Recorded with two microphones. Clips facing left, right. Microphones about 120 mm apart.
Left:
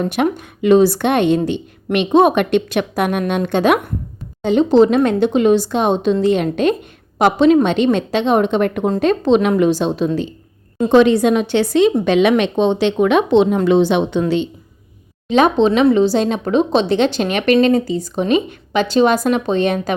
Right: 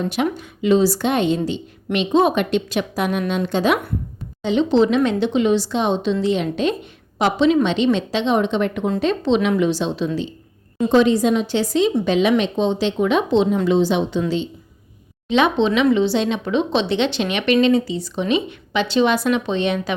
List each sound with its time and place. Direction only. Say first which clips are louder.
0.0 s a woman's voice: left 4 dB; 55° left (ahead or behind)
4.4 s speech: left 5 dB; 45° left (ahead or behind)
10.8 s a woman's voice: left 4 dB; 65° left (ahead or behind)
15.3 s speech: left 4 dB; 40° left (ahead or behind)